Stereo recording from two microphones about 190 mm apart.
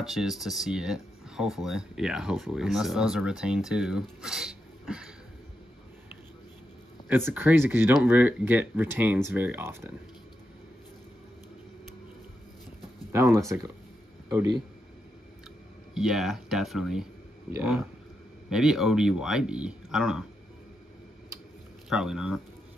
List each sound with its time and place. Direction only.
0.0 s speech: centre (ahead or behind)
7.3 s speech: 10° right (ahead or behind)
13.1 s a man's voice: 15° right (ahead or behind)
15.9 s speech: centre (ahead or behind)
21.8 s speech: 5° right (ahead or behind)